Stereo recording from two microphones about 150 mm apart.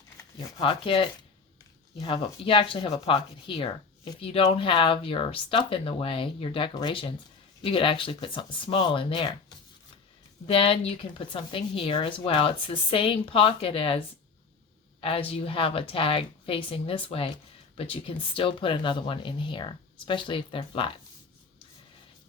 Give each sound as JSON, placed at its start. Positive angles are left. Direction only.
{"t": 0.3, "sound": "a woman's voice", "side_deg": 35}
{"t": 10.4, "sound": "a woman's voice", "side_deg": 40}
{"t": 15.0, "sound": "a woman's voice", "side_deg": 40}